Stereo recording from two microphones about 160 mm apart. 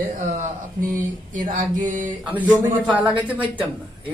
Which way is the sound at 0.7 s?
55° right (ahead or behind).